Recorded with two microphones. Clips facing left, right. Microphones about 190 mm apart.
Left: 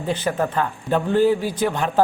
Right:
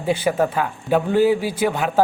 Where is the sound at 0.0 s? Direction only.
10° right (ahead or behind).